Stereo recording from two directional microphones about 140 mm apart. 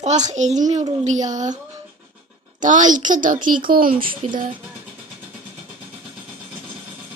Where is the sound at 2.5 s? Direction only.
65° right (ahead or behind); by 3.9 s 90° right.